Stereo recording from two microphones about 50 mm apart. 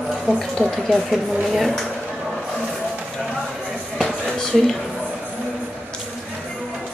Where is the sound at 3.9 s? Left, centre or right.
Centre.